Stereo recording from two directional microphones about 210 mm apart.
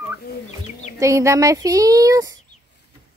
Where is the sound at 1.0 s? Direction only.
15° right (ahead or behind).